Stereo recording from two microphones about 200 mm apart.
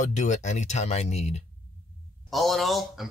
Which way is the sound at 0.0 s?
35° left (ahead or behind).